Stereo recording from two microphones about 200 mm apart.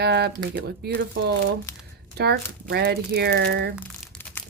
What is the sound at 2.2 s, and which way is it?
Speech, 55° right (ahead or behind).